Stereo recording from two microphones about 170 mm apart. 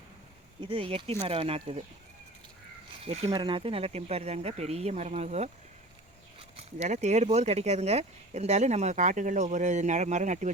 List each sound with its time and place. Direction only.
0.6 s speech: 30° right (ahead or behind)
3.0 s speech: 35° right (ahead or behind)
6.7 s speech: 45° right (ahead or behind)